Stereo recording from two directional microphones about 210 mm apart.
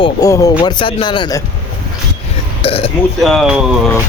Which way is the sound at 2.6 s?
25° left (ahead or behind).